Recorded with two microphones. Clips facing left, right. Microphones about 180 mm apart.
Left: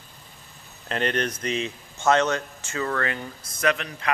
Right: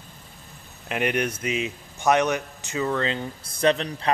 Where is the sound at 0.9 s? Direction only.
10° right (ahead or behind).